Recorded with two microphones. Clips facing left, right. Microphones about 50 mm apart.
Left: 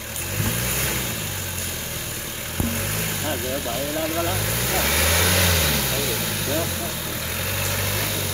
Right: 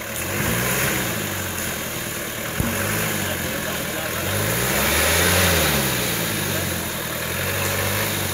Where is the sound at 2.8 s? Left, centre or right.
Right.